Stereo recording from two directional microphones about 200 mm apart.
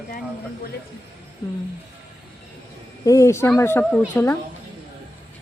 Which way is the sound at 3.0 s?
15° left (ahead or behind).